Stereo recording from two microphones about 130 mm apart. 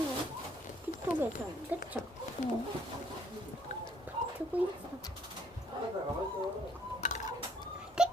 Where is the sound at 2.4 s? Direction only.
70° left (ahead or behind).